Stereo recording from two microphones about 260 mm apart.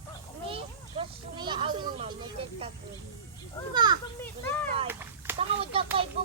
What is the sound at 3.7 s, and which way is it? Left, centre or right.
Speech, centre.